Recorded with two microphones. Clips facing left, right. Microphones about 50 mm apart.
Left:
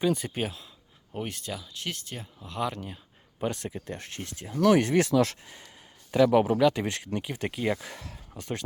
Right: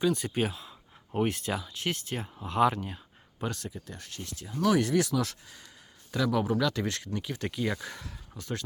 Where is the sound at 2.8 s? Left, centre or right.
Centre.